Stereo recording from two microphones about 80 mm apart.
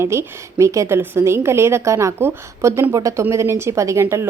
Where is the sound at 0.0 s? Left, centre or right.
Right.